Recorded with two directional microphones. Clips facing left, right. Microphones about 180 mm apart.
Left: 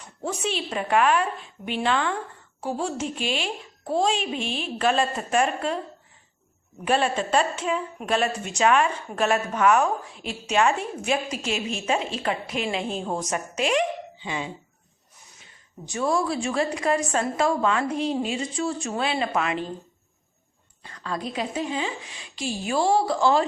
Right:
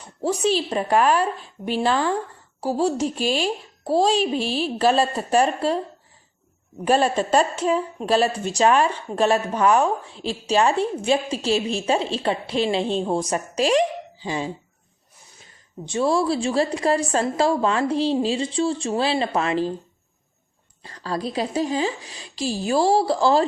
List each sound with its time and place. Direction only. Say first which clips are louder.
0.2 s a woman's voice: right 7 dB; 35° right (ahead or behind)
6.8 s a woman's voice: right 4 dB; 40° right (ahead or behind)
15.9 s a woman's voice: right 4 dB; 30° right (ahead or behind)
20.8 s a woman's voice: right 4 dB; 35° right (ahead or behind)